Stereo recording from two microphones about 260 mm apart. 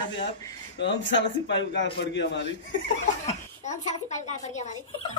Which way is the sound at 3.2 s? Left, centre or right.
Left.